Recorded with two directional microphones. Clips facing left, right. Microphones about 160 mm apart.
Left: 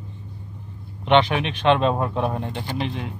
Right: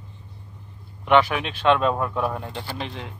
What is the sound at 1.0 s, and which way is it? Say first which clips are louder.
Speech: left 1 dB; 20° left (ahead or behind).